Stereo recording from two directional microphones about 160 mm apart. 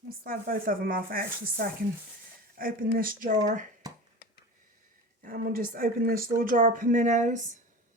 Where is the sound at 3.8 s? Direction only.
25° right (ahead or behind).